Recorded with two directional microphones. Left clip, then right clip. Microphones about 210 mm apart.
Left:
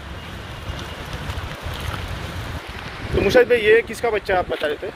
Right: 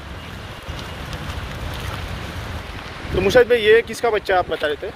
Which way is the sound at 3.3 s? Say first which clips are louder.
Right 1 dB; centre (ahead or behind).